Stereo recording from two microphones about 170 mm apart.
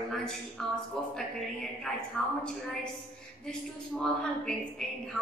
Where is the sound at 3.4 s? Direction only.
5° left (ahead or behind).